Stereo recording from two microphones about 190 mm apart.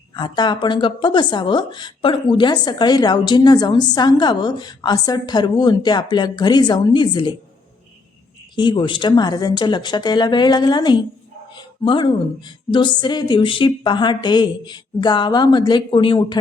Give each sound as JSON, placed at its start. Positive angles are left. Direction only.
{"t": 0.1, "sound": "speech", "side_deg": 25}
{"t": 8.5, "sound": "speech", "side_deg": 25}